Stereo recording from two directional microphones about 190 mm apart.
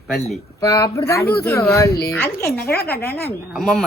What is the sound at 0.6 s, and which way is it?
A woman's voice, 15° left (ahead or behind).